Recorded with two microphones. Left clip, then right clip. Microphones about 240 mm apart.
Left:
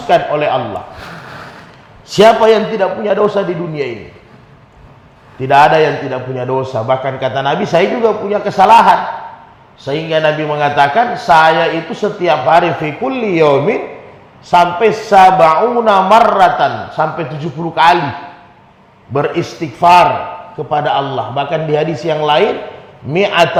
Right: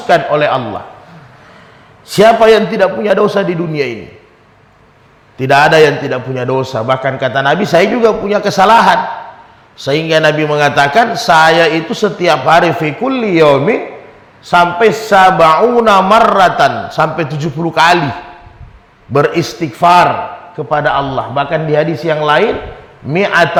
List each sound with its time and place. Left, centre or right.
0.1 s a man's voice: right
2.0 s a man's voice: right
5.4 s a man's voice: right
19.1 s a man's voice: right